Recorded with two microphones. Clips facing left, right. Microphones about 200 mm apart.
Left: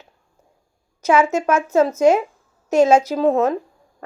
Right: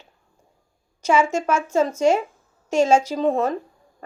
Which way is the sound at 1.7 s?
10° left (ahead or behind).